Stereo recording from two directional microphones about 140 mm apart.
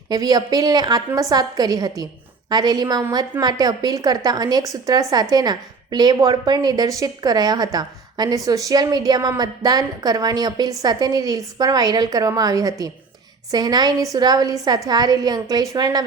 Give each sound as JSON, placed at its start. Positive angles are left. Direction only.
{"t": 0.1, "sound": "a woman's voice", "side_deg": -25}